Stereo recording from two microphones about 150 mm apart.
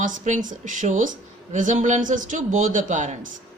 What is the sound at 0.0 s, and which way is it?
Speech, 60° right (ahead or behind).